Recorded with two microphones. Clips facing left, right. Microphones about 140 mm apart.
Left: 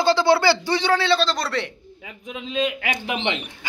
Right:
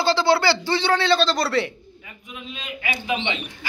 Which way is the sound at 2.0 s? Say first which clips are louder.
Left 5 dB; 90° left.